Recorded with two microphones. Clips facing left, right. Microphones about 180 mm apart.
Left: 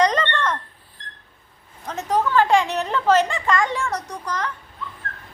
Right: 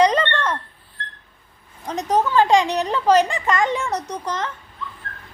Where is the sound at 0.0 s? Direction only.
10° right (ahead or behind).